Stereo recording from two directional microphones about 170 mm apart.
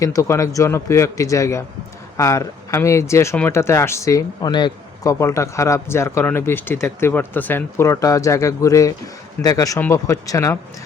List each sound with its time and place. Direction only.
0.0 s speech: 20° left (ahead or behind)